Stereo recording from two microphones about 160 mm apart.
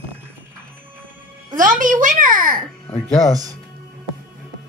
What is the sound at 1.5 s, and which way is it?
A child's voice, 55° right (ahead or behind).